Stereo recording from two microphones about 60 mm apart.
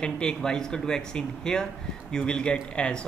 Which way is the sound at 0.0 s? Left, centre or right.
Centre.